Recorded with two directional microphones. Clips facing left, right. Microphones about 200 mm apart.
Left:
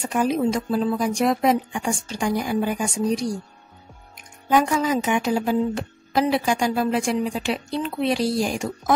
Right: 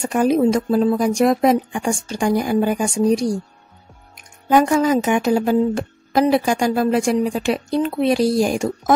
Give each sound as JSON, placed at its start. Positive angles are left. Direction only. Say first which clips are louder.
{"t": 0.0, "sound": "speech", "louder": "right 5 dB", "side_deg": -50}
{"t": 4.5, "sound": "speech", "louder": "right 5 dB", "side_deg": -45}